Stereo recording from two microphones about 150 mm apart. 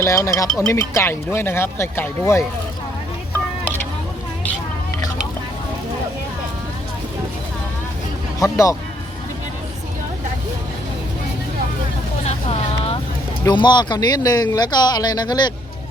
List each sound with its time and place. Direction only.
0.0 s speech: 20° left (ahead or behind)
8.4 s speech: 20° left (ahead or behind)
12.2 s vehicle: 40° left (ahead or behind)
13.5 s speech: 30° left (ahead or behind)